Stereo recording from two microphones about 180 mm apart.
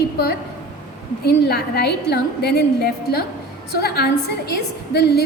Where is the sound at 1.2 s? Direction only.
60° left (ahead or behind).